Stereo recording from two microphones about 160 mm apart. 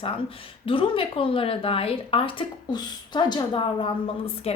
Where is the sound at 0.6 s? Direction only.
35° left (ahead or behind).